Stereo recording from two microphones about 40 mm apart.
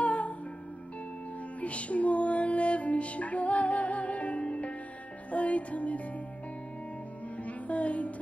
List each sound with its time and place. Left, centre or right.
0.0 s music: left
1.6 s music: left
7.4 s music: left